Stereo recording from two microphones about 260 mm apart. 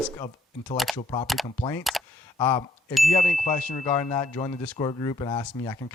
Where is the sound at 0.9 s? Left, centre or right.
Centre.